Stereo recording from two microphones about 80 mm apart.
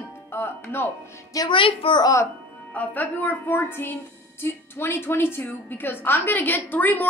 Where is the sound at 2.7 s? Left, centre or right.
Left.